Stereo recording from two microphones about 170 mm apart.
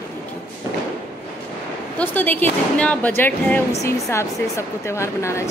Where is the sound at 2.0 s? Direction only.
10° left (ahead or behind).